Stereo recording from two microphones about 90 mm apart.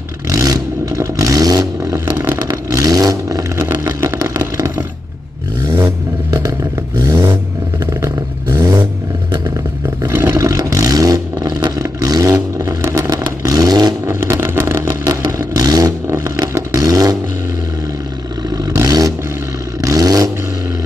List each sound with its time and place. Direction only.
0.3 s vehicle: 35° right (ahead or behind)
4.0 s a sound: 35° right (ahead or behind)
7.0 s vehicle: 40° right (ahead or behind)
10.0 s vehicle: 30° right (ahead or behind)
13.2 s vehicle: 40° right (ahead or behind)
14.0 s vehicle: 30° right (ahead or behind)
18.9 s vehicle: 45° right (ahead or behind)